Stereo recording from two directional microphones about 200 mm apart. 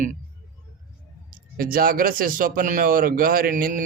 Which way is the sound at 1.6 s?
45° right (ahead or behind).